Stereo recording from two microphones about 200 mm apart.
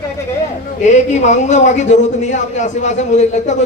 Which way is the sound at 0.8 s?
35° left (ahead or behind).